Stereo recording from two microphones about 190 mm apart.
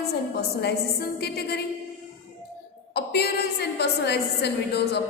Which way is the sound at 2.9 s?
60° left (ahead or behind).